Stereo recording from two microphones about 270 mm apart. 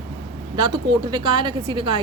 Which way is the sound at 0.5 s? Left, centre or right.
Centre.